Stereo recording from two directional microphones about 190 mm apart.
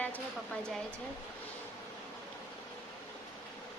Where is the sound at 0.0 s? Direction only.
5° left (ahead or behind).